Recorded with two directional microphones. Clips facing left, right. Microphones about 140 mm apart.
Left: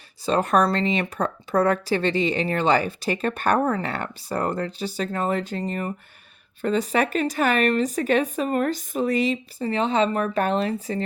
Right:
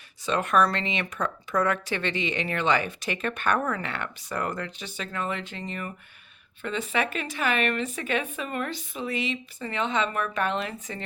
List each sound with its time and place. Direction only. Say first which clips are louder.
0.3 s speech: left 3 dB; 35° left (ahead or behind)